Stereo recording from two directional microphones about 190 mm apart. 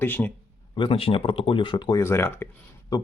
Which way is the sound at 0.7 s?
25° left (ahead or behind).